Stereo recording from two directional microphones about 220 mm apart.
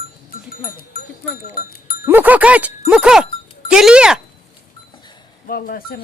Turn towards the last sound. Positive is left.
turn(degrees=45)  # may be behind; listen again after turning